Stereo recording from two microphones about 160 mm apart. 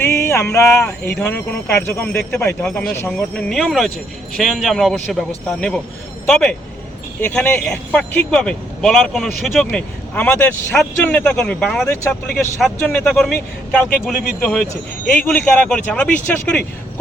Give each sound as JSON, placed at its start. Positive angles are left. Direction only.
{"t": 0.0, "sound": "a sound", "side_deg": 15}
{"t": 1.2, "sound": "speech", "side_deg": 10}
{"t": 10.2, "sound": "speech", "side_deg": 15}